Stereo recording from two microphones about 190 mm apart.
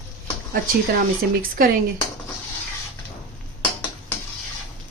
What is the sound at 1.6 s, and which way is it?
Speech, 50° right (ahead or behind).